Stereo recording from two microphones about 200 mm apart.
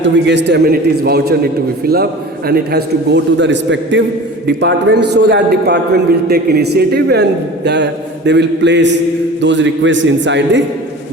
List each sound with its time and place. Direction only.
0.0 s a man's voice: 60° right (ahead or behind)
2.5 s a man's voice: 55° right (ahead or behind)